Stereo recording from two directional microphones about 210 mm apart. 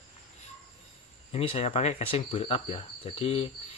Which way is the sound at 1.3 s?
30° left (ahead or behind).